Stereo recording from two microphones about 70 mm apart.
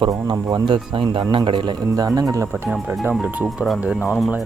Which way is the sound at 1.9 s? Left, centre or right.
Right.